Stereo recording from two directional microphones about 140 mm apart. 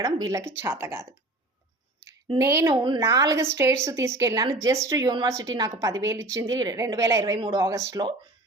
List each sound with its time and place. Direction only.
0.0 s a woman's voice: 25° right (ahead or behind)
2.4 s a woman's voice: 20° right (ahead or behind)